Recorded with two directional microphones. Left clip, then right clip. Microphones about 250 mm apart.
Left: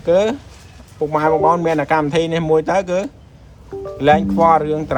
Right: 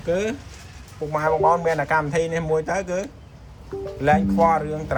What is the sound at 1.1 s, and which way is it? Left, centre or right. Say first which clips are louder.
Speech: left 4 dB; left.